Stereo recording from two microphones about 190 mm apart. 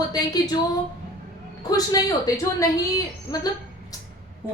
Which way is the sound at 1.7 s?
20° left (ahead or behind).